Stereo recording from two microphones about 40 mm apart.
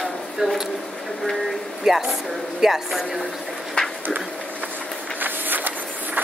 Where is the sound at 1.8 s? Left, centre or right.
Centre.